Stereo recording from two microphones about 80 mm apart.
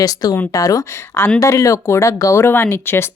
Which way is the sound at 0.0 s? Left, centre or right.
Left.